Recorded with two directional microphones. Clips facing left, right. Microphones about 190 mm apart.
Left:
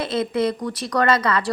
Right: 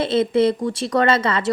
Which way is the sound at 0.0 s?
30° right (ahead or behind).